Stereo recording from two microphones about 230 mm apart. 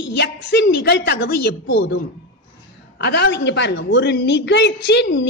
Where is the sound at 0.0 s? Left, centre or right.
Left.